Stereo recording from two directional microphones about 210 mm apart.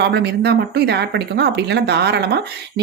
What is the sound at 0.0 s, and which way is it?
Speech, 50° right (ahead or behind).